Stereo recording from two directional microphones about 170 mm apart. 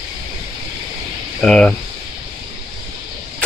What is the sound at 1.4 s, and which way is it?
Speech, 5° left (ahead or behind).